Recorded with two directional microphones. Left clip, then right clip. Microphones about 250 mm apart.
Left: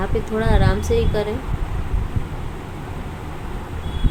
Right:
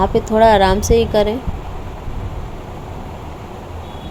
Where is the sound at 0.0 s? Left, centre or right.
Right.